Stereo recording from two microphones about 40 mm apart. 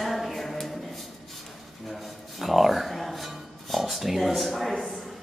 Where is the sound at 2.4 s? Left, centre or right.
Centre.